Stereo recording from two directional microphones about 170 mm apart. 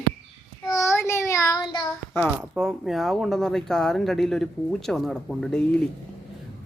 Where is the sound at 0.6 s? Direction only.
20° left (ahead or behind).